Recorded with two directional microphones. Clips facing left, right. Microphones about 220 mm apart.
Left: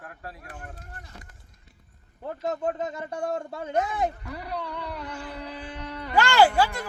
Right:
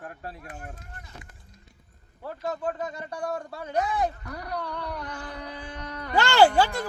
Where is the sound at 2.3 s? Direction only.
20° left (ahead or behind).